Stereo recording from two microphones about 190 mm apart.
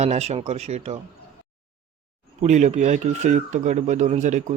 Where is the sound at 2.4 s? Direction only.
40° right (ahead or behind).